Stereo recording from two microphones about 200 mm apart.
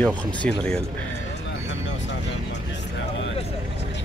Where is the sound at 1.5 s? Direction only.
65° left (ahead or behind).